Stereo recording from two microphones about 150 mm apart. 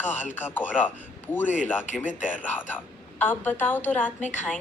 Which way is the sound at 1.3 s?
15° left (ahead or behind).